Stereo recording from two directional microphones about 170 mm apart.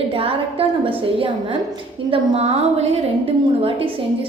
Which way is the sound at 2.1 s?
35° right (ahead or behind).